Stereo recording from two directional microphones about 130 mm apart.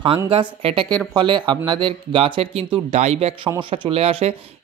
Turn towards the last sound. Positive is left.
turn(degrees=-50)  # may be behind; listen again after turning